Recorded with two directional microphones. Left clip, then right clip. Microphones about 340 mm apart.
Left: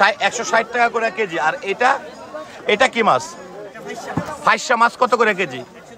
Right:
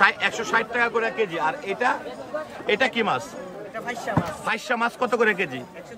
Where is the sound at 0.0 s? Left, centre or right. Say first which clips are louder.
Left 4 dB; centre.